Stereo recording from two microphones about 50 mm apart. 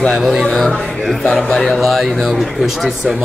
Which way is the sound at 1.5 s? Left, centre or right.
Centre.